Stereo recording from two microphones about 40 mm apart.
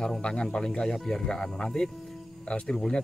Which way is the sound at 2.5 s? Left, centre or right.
Left.